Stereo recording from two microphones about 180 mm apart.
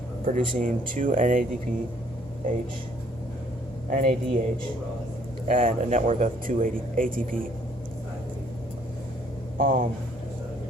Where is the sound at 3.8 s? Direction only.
45° right (ahead or behind).